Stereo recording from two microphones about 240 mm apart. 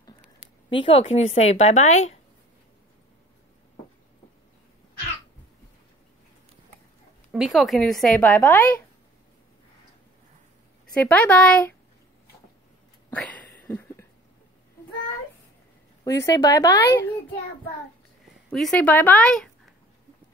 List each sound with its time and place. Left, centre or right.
0.7 s a woman's voice: left
7.3 s a woman's voice: centre
10.9 s a woman's voice: centre
13.1 s a sound: centre
16.0 s speech: centre
18.5 s speech: centre